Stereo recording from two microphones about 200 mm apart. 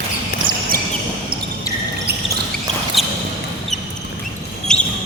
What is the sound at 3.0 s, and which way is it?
Basketball bounce, centre (ahead or behind).